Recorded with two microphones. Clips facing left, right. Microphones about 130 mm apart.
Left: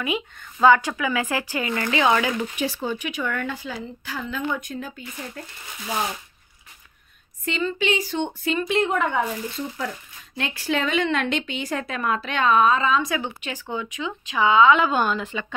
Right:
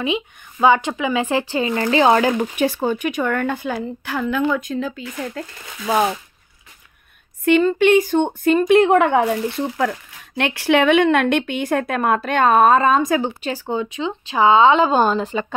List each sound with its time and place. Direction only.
0.0 s speech: 20° right (ahead or behind); by 2.3 s 35° right (ahead or behind)
2.3 s speech: 55° right (ahead or behind); by 5.4 s 90° right
7.4 s speech: 55° right (ahead or behind); by 15.4 s 35° right (ahead or behind)